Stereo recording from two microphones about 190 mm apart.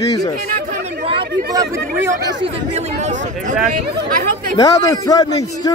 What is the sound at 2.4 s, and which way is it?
Speech, 35° right (ahead or behind).